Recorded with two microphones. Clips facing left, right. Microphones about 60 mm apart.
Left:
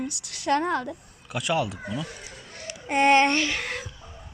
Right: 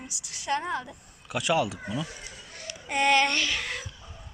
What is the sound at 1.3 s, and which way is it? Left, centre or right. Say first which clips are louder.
Speech: even; centre.